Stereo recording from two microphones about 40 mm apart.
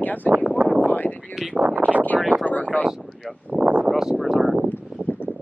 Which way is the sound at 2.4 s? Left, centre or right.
Left.